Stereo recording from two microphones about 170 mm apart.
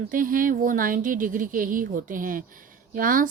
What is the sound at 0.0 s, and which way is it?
Speech, 55° right (ahead or behind).